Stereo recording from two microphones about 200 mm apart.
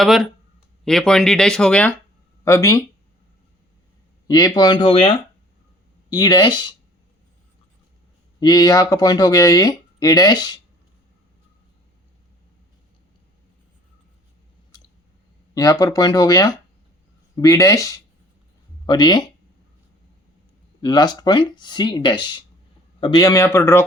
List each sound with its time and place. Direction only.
0.0 s speech: centre (ahead or behind); by 2.8 s 15° left (ahead or behind)
4.3 s speech: 20° left (ahead or behind)
8.4 s speech: 20° left (ahead or behind)
14.7 s a sound: 20° left (ahead or behind)
15.5 s speech: 15° left (ahead or behind)
18.9 s speech: 20° left (ahead or behind)
20.8 s speech: 20° left (ahead or behind)